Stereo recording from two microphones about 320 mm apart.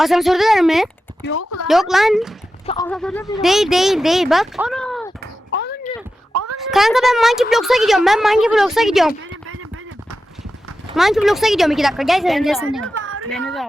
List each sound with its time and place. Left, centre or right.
0.0 s speech: centre
1.2 s speech: left
1.6 s speech: centre
5.5 s a sound: left
6.3 s a sound: right
6.6 s speech: centre
10.9 s speech: centre
13.0 s a sound: right
13.3 s speech: centre